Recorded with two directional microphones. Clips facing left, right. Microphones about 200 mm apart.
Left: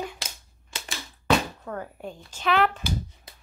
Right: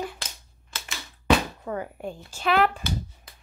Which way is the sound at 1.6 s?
10° right (ahead or behind).